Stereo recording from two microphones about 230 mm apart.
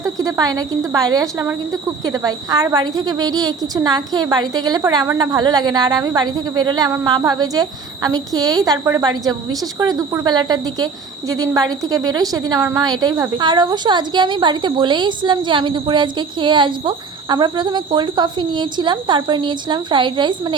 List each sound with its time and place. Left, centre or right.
0.0 s a woman's voice: centre